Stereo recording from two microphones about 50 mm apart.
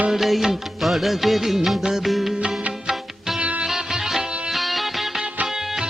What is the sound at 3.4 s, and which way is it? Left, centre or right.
Music, right.